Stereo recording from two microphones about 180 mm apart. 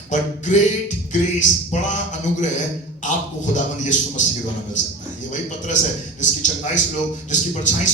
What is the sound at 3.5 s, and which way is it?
A man's voice, 45° left (ahead or behind).